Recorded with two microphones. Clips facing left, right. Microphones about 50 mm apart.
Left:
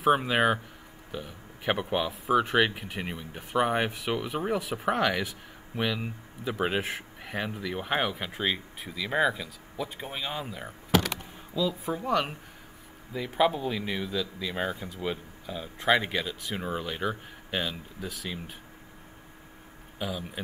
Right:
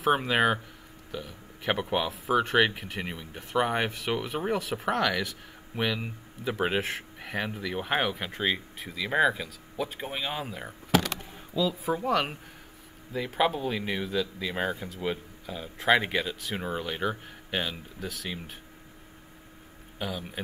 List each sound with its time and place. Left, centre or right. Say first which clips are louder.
0.0 s speech: left 1 dB; centre
1.1 s a man's voice: even; centre
1.7 s speech: even; centre
5.8 s speech: even; centre
9.9 s speech: right 1 dB; centre
13.1 s speech: left 1 dB; centre
18.0 s speech: right 1 dB; centre
20.0 s speech: even; centre